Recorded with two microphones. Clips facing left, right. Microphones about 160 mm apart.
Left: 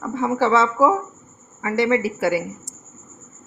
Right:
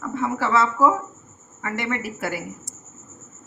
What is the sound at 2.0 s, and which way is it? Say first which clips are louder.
Speech: left 8 dB; 90° left.